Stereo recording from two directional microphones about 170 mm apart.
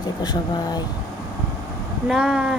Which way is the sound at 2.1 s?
Centre (ahead or behind).